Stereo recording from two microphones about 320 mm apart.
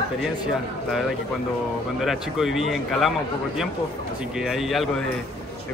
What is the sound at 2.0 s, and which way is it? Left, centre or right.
Speech, centre.